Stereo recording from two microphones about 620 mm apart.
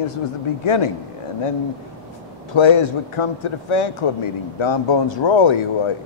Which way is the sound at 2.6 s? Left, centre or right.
Left.